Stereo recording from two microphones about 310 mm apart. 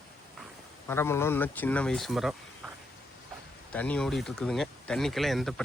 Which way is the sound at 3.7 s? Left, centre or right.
Centre.